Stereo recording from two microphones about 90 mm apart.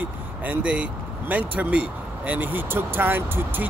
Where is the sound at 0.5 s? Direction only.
15° right (ahead or behind).